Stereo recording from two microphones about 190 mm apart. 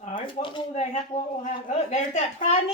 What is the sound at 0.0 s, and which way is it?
Speech, 25° left (ahead or behind).